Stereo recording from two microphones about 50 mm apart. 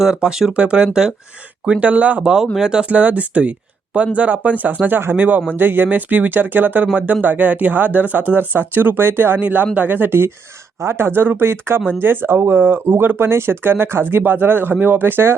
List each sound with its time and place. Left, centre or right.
0.0 s speech: centre
2.6 s speech: centre
2.9 s speech: right
4.9 s speech: right
5.1 s speech: right
9.4 s speech: right